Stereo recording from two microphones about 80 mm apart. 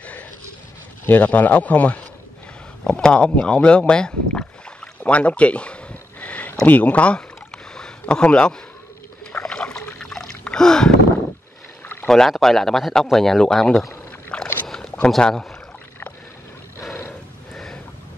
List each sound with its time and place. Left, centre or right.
1.0 s speech: left
2.8 s boat: centre
6.6 s speech: centre
7.7 s a sound: centre
9.3 s rowboat: centre
9.9 s a sound: centre
12.1 s speech: centre
14.3 s boat: centre
14.7 s a sound: centre
15.0 s speech: centre